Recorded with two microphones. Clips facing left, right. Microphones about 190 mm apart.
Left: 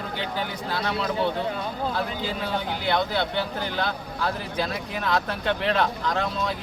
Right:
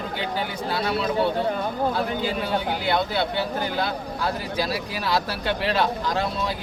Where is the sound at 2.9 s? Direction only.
5° right (ahead or behind).